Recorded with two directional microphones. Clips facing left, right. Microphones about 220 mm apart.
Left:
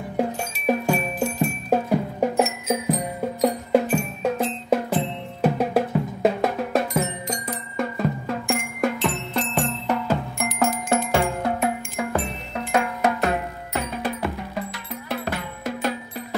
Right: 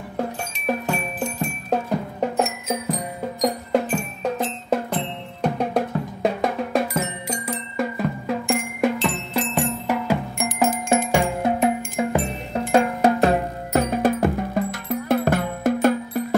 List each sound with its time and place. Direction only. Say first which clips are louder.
0.8 s music: left 3 dB; 10° left (ahead or behind); by 12.2 s 20° right (ahead or behind)
12.5 s music: right 5 dB; 30° right (ahead or behind)
13.8 s music: right 7 dB; 45° right (ahead or behind)